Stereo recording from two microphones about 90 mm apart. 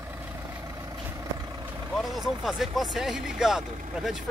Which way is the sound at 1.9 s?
Centre (ahead or behind).